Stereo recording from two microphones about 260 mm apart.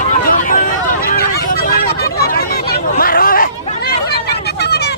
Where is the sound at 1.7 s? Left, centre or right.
Left.